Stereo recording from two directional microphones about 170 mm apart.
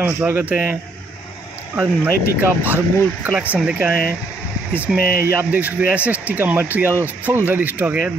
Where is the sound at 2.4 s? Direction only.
10° right (ahead or behind).